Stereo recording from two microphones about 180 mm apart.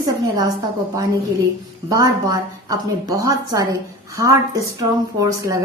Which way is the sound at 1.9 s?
20° right (ahead or behind).